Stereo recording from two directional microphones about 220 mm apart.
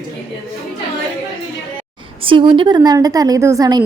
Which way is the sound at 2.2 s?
25° right (ahead or behind).